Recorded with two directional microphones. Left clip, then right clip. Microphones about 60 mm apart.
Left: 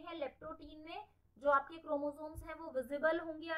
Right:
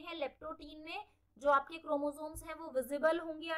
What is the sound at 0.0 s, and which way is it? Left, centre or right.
A woman's voice, right.